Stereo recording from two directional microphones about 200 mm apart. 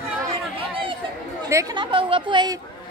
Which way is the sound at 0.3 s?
25° right (ahead or behind).